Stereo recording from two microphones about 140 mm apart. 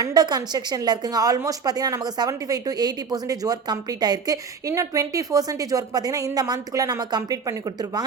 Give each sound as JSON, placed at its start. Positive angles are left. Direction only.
{"t": 0.0, "sound": "a woman's voice", "side_deg": -30}